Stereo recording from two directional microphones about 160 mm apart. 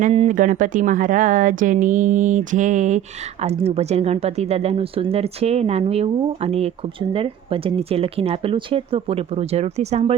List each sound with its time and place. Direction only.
0.1 s speech: 45° right (ahead or behind)